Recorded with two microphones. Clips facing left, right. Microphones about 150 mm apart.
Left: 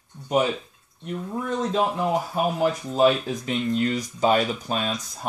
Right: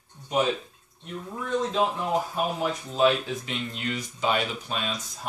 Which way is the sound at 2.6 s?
40° left (ahead or behind).